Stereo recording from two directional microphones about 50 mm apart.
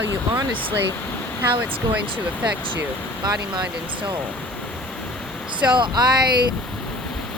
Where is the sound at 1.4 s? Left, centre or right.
Right.